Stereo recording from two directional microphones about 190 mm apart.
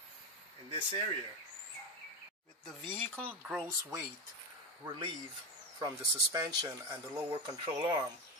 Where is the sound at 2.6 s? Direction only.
10° left (ahead or behind).